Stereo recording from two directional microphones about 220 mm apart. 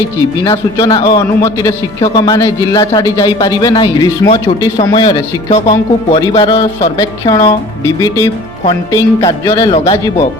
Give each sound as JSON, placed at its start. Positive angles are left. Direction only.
{"t": 0.4, "sound": "a man's voice", "side_deg": 15}